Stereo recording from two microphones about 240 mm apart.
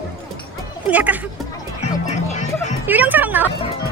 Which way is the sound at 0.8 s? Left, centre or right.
Centre.